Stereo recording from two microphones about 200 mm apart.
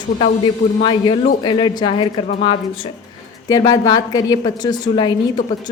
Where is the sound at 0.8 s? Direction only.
25° left (ahead or behind).